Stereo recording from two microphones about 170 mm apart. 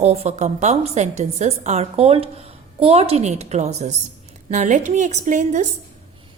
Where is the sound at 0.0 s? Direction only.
40° right (ahead or behind).